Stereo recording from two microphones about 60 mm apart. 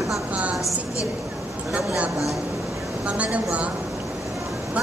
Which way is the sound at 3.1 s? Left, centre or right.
Centre.